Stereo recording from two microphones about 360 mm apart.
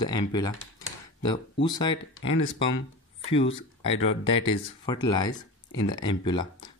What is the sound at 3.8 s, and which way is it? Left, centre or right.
Speech, left.